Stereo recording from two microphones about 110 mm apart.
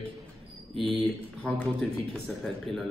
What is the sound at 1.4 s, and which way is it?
A man's voice, 10° left (ahead or behind).